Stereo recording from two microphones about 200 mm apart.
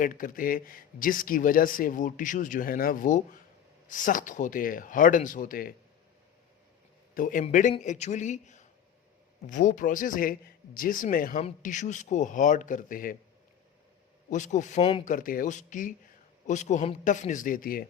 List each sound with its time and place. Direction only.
0.0 s speech: 45° left (ahead or behind)
7.1 s speech: 45° left (ahead or behind)
14.3 s speech: 40° left (ahead or behind)
15.0 s speech: 45° left (ahead or behind)